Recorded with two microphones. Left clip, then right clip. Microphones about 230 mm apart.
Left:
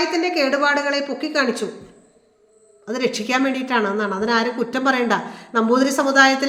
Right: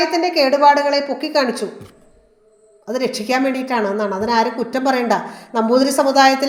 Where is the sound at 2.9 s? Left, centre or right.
Centre.